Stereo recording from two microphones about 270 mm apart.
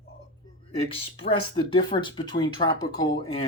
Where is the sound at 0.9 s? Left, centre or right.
Centre.